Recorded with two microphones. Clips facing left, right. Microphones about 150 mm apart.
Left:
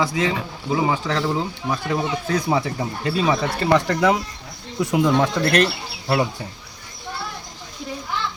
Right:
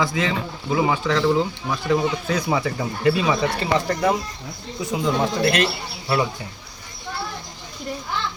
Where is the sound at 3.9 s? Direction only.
80° left.